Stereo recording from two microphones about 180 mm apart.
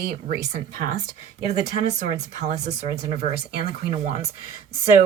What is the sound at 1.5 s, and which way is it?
Speech, 40° right (ahead or behind).